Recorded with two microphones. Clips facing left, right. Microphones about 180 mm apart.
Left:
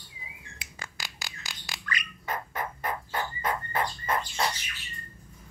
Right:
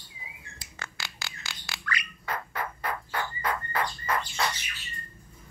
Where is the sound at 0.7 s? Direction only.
15° left (ahead or behind).